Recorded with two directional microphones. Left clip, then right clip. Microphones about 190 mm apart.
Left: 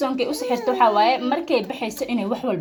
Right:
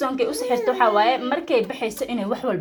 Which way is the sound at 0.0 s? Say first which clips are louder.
Even; 15° right (ahead or behind).